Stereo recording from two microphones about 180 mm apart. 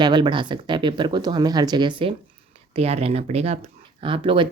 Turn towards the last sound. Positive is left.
turn(degrees=-30)  # may be behind; listen again after turning